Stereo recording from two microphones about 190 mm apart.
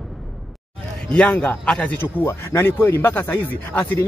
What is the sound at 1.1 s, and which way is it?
A man's voice, 5° left (ahead or behind).